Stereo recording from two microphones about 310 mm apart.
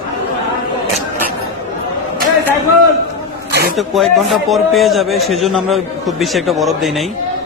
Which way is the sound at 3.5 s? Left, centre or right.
Right.